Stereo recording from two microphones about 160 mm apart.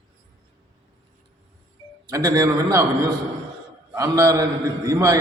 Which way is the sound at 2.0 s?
20° right (ahead or behind).